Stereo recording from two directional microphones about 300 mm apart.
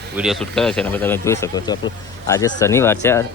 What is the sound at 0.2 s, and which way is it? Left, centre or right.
Speech, centre.